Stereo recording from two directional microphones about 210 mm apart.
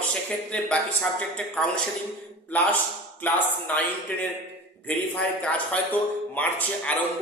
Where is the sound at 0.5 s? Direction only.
5° left (ahead or behind).